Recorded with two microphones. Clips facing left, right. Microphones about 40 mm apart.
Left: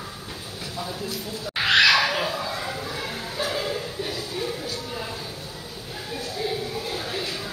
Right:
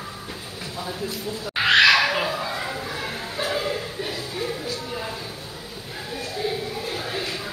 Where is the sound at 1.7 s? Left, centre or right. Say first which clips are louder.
Right 2 dB; right.